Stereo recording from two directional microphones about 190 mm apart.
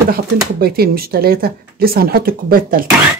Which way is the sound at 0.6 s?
55° right (ahead or behind).